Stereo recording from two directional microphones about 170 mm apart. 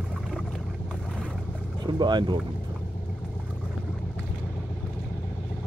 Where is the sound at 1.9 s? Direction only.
25° right (ahead or behind).